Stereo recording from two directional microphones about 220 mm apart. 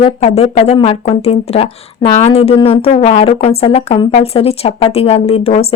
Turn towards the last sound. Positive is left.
turn(degrees=30)  # may be behind; listen again after turning